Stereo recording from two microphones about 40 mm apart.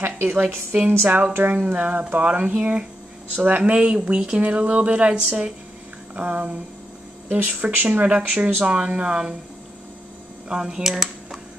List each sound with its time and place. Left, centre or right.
0.3 s a woman's voice: right
0.8 s speech: right
1.3 s speech: right
2.6 s speech: right
3.3 s speech: right
8.6 s speech: right
10.5 s speech: centre
10.9 s a sound: centre